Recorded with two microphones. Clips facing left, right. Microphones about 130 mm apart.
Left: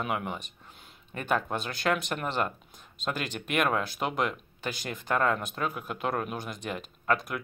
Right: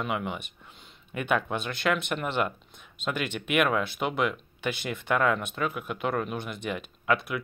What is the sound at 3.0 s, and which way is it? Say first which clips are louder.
Speech: right 2 dB; 40° left (ahead or behind).